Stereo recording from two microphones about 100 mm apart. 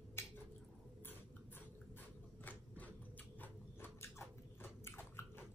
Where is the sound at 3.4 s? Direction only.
25° left (ahead or behind).